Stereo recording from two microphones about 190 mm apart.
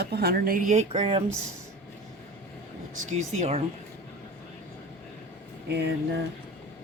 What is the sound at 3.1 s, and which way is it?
Speech, 40° right (ahead or behind).